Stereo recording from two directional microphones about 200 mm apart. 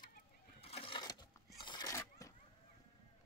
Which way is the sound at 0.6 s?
30° left (ahead or behind).